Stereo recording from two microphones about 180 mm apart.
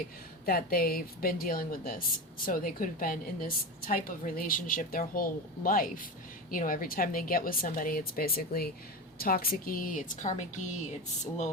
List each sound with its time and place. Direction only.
0.4 s speech: 55° left (ahead or behind)